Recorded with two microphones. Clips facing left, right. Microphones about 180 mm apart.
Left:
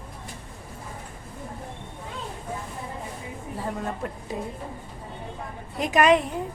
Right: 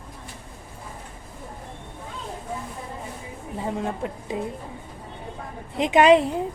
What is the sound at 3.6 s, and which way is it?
Speech, 20° right (ahead or behind).